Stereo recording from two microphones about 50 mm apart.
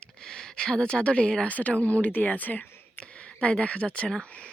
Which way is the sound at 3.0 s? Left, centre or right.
Left.